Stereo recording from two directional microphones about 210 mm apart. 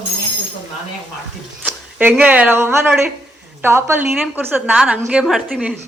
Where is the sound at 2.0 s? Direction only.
10° right (ahead or behind).